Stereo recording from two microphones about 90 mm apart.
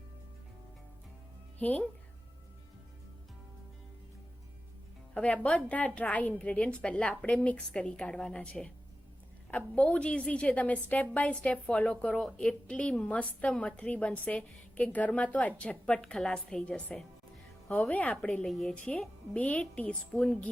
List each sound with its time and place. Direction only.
1.5 s speech: 15° left (ahead or behind)
5.1 s a woman's voice: 15° left (ahead or behind)
18.4 s a woman's voice: 5° left (ahead or behind)